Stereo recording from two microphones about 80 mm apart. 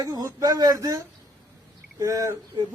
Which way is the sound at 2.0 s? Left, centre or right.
Right.